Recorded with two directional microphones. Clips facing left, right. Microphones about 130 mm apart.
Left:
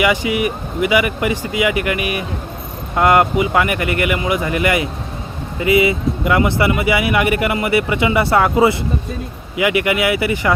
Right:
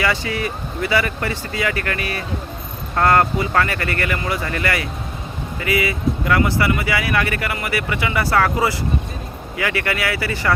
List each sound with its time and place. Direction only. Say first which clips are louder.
0.0 s speech: left 5 dB; 15° left (ahead or behind)